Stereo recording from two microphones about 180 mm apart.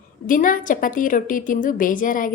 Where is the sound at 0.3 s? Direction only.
50° left (ahead or behind).